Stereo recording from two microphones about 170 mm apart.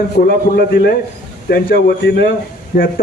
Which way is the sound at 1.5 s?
65° left (ahead or behind).